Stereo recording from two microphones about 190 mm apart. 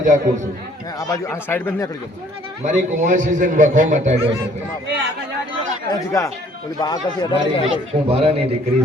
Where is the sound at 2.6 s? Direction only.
45° right (ahead or behind).